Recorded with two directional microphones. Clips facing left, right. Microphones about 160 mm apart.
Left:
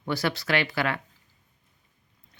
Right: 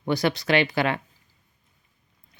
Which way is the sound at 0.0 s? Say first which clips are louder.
Right 4 dB; 20° right (ahead or behind).